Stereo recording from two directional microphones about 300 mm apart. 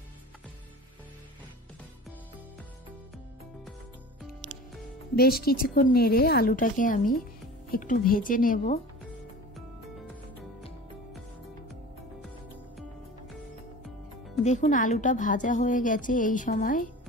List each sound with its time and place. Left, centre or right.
5.1 s a woman's voice: left
14.4 s a woman's voice: left